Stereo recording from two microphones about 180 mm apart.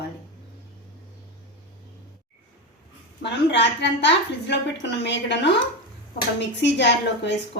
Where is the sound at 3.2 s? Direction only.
75° left (ahead or behind).